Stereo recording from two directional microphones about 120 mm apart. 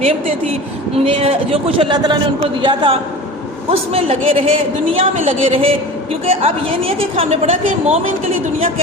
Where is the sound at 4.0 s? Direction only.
55° right (ahead or behind).